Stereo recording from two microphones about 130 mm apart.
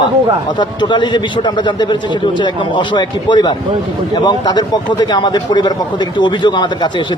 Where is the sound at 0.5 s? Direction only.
35° left (ahead or behind).